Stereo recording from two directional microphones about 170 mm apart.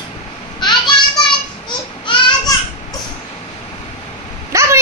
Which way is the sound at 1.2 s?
25° left (ahead or behind).